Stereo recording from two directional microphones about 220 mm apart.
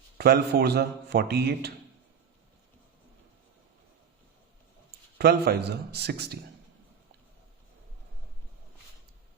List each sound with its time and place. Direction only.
0.2 s a man's voice: 45° right (ahead or behind)
5.1 s a man's voice: 45° right (ahead or behind)